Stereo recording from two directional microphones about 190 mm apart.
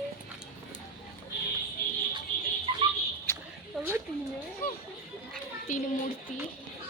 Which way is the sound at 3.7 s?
Centre (ahead or behind).